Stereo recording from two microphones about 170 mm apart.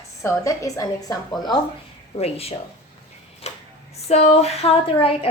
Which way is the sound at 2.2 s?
35° left (ahead or behind).